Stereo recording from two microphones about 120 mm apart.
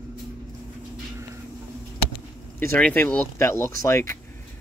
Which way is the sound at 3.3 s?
25° left (ahead or behind).